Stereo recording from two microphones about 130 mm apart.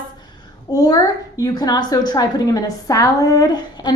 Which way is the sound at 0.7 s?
30° left (ahead or behind).